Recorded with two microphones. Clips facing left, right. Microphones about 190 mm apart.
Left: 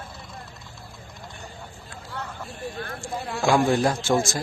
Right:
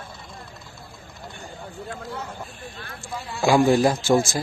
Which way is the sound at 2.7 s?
45° left (ahead or behind).